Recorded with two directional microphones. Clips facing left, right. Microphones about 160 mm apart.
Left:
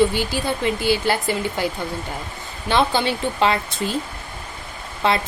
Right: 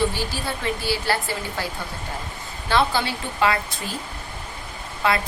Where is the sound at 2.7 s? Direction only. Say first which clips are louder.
Left 2 dB; 20° left (ahead or behind).